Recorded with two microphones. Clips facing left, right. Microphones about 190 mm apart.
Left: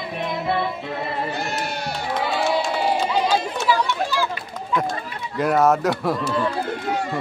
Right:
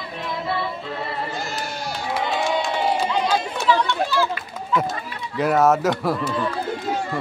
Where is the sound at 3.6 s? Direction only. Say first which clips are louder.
Right 1 dB; 10° left (ahead or behind).